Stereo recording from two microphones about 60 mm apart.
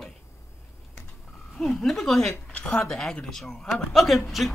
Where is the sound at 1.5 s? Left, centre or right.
Centre.